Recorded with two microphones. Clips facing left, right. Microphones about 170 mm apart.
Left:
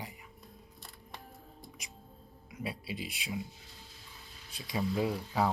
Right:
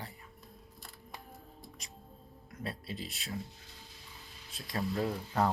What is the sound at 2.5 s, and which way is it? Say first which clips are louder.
Speech: left 2 dB; 5° left (ahead or behind).